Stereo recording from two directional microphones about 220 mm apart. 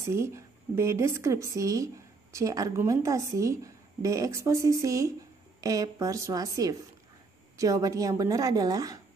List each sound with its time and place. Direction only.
0.0 s speech: 15° right (ahead or behind)